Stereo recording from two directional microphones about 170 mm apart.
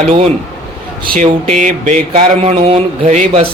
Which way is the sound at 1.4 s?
45° right (ahead or behind).